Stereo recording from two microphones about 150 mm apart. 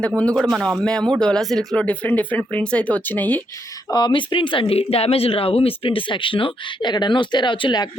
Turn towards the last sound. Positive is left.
turn(degrees=30)  # may be behind; listen again after turning